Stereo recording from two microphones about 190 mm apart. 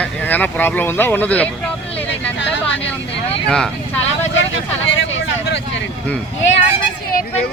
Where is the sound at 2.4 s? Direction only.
75° left (ahead or behind).